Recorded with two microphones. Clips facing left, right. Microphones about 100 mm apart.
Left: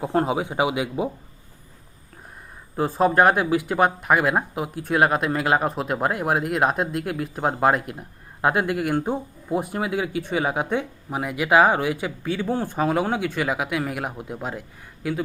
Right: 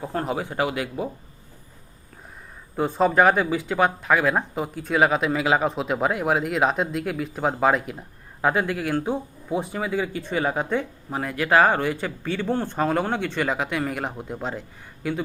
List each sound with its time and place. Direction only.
0.3 s speech: 15° left (ahead or behind)
2.7 s speech: centre (ahead or behind)